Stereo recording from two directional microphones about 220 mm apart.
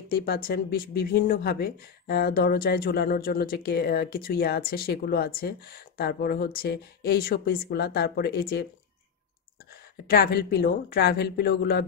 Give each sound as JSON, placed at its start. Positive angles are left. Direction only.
{"t": 0.1, "sound": "speech", "side_deg": 45}
{"t": 10.0, "sound": "speech", "side_deg": 45}